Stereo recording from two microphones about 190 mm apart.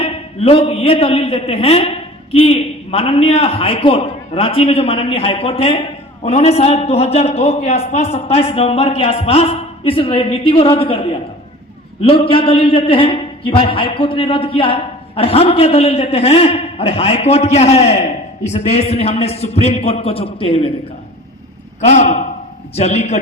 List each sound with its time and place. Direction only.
0.0 s a man's voice: 30° left (ahead or behind)
21.8 s a man's voice: 40° left (ahead or behind)